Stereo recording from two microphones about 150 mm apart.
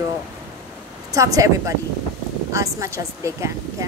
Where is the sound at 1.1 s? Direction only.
20° right (ahead or behind).